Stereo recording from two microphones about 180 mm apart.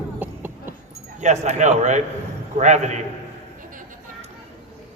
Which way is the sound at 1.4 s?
40° right (ahead or behind).